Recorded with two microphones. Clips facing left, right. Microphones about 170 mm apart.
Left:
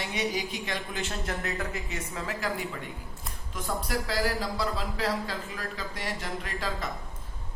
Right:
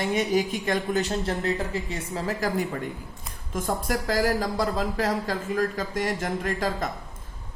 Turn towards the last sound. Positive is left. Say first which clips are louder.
# right 7 dB
turn(degrees=-45)  # may be behind; listen again after turning